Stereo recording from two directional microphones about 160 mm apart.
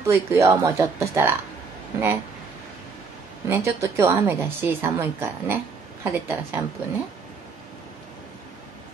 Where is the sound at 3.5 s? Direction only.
15° right (ahead or behind).